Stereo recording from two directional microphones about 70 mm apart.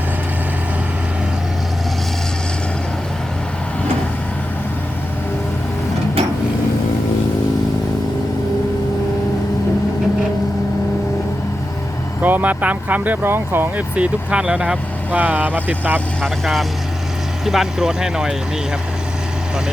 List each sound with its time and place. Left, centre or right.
12.2 s speech: right
13.7 s speech: centre
16.2 s speech: centre